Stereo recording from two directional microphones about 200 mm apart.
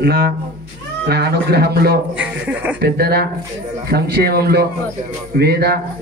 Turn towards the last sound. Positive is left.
turn(degrees=-50)  # may be behind; listen again after turning